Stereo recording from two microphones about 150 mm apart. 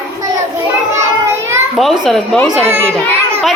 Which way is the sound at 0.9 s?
15° right (ahead or behind).